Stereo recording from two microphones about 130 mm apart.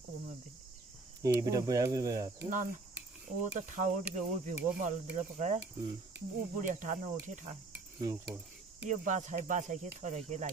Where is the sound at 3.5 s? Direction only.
70° right (ahead or behind).